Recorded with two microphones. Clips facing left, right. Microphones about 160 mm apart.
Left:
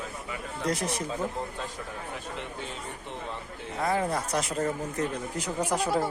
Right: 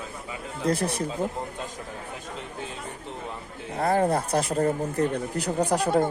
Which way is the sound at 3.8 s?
35° right (ahead or behind).